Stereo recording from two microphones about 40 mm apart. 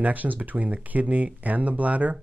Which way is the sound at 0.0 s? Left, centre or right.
Right.